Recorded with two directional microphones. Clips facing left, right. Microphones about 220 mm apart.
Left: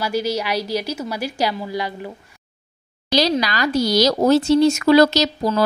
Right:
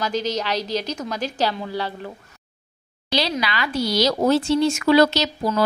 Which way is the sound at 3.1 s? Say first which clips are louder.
Left 5 dB; 40° left (ahead or behind).